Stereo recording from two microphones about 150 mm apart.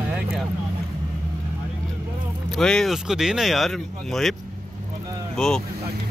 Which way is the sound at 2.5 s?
5° left (ahead or behind).